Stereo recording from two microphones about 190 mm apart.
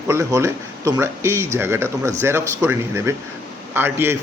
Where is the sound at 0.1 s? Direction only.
15° right (ahead or behind).